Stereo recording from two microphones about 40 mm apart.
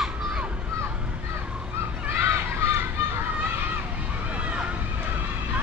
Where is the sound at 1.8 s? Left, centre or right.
Right.